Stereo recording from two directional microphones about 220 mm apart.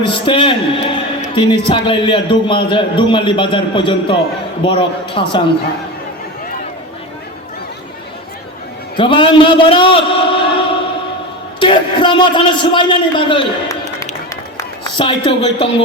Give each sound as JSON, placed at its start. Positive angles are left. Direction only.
{"t": 0.1, "sound": "a man's voice", "side_deg": 25}
{"t": 9.0, "sound": "a man's voice", "side_deg": 20}
{"t": 14.8, "sound": "a man's voice", "side_deg": 20}